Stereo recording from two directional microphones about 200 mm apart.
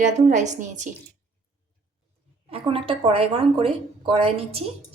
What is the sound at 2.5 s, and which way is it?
Speech, 30° right (ahead or behind).